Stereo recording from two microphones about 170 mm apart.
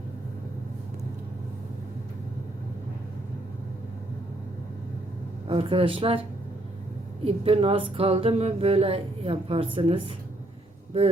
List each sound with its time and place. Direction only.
5.5 s a woman's voice: 30° right (ahead or behind)
7.3 s a woman's voice: 35° right (ahead or behind)